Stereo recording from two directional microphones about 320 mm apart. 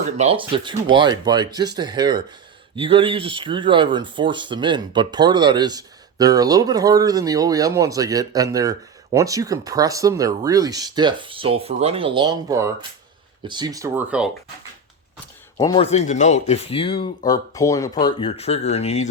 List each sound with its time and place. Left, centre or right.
0.2 s speech: centre
15.5 s speech: centre